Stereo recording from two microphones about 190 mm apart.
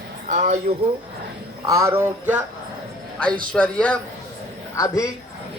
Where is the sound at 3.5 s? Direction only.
5° left (ahead or behind).